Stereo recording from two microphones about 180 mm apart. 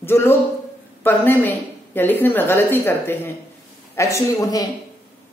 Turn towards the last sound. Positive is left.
turn(degrees=20)  # may be behind; listen again after turning